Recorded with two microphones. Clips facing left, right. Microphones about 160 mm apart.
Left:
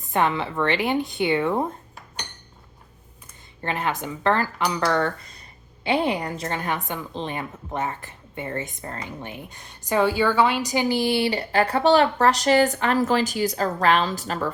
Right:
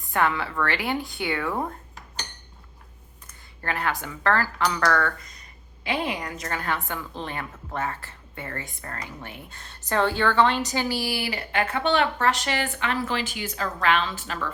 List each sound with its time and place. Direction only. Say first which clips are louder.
0.0 s a woman's voice: left 2 dB; 20° left (ahead or behind)
3.6 s a woman's voice: left 2 dB; 20° left (ahead or behind)
6.6 s a woman's voice: left 2 dB; 20° left (ahead or behind); by 14.5 s 40° left (ahead or behind)